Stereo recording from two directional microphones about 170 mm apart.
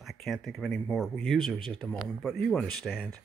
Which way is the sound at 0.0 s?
Centre (ahead or behind).